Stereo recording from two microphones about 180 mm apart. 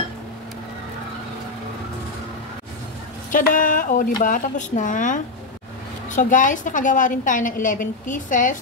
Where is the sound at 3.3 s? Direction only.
50° left (ahead or behind).